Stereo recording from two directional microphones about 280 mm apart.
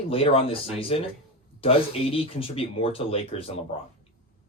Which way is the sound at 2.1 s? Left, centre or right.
Centre.